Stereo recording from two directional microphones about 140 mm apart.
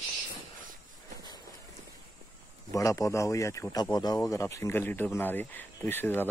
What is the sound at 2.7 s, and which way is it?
Speech, 25° left (ahead or behind).